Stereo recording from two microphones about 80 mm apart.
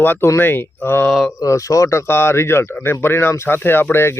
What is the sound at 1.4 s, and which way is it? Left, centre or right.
Speech, left.